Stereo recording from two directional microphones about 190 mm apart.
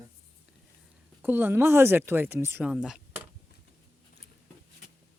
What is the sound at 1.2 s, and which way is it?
Speech, 10° right (ahead or behind).